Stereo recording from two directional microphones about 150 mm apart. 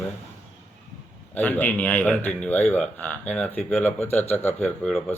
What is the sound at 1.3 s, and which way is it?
Speech, 10° left (ahead or behind).